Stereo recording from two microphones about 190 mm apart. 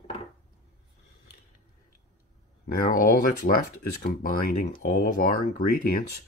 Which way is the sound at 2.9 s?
50° left (ahead or behind).